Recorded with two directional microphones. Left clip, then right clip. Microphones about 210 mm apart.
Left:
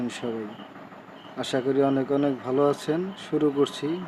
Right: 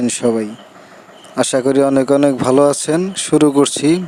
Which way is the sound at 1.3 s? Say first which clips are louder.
Right 11 dB; 50° right (ahead or behind).